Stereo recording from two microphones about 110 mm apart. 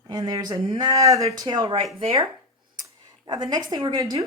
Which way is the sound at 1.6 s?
50° right (ahead or behind).